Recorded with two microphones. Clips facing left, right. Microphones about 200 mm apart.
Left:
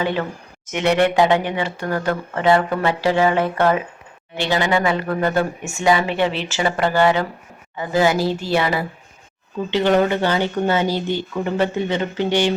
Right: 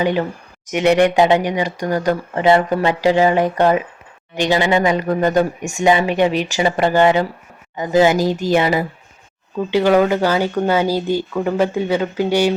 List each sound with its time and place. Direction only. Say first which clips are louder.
0.0 s speech: right 4 dB; 15° right (ahead or behind)